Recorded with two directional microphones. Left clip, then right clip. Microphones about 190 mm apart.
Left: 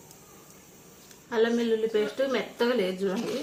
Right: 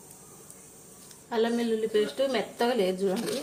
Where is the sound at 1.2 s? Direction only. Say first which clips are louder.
Left 2 dB; 15° right (ahead or behind).